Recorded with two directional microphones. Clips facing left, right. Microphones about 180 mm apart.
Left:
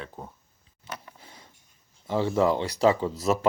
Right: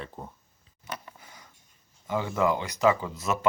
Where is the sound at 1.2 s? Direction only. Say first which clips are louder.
Left 1 dB; 30° left (ahead or behind).